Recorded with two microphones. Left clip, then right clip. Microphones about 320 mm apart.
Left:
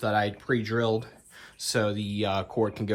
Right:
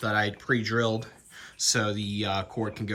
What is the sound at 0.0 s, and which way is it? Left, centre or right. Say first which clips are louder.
Speech: left 1 dB; centre.